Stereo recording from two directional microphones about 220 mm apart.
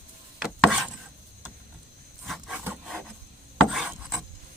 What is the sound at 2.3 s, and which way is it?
Rub, 5° right (ahead or behind).